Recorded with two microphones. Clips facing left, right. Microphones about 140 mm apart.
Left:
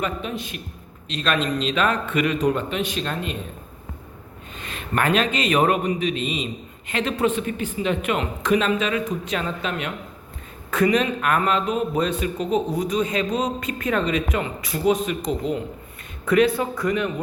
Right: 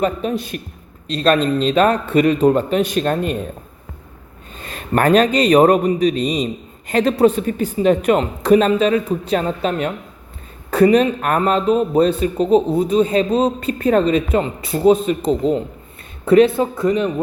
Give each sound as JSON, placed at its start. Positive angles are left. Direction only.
{"t": 0.0, "sound": "a man's voice", "side_deg": -40}
{"t": 4.6, "sound": "a man's voice", "side_deg": -40}